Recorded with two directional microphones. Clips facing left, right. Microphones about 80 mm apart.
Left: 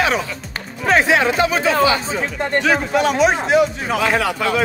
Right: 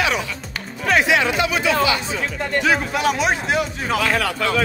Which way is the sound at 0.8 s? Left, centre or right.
Left.